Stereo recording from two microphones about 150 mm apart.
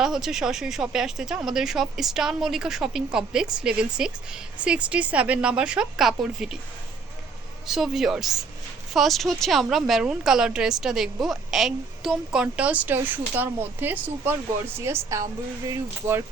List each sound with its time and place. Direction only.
0.0 s speech: 5° right (ahead or behind)
7.7 s speech: centre (ahead or behind); by 16.2 s 20° right (ahead or behind)